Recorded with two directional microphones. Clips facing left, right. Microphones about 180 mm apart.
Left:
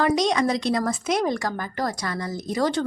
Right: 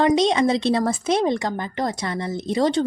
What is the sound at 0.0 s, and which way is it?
A woman's voice, 25° right (ahead or behind).